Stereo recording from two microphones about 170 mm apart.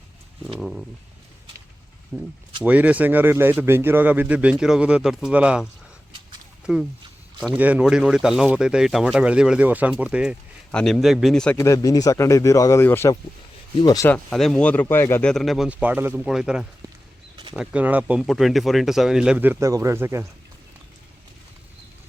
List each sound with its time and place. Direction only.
0.6 s speech: centre (ahead or behind)
2.1 s a man's voice: 10° right (ahead or behind)
6.7 s a man's voice: 5° right (ahead or behind)
10.7 s speech: 5° left (ahead or behind)
11.5 s speech: 20° left (ahead or behind)
14.1 s speech: 5° left (ahead or behind); by 20.2 s 15° right (ahead or behind)